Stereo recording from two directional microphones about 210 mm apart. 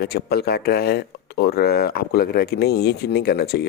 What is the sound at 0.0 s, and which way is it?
Speech, 50° left (ahead or behind).